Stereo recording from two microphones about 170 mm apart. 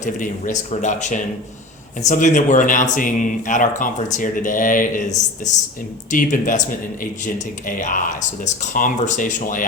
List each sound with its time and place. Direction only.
0.0 s speech: 50° left (ahead or behind)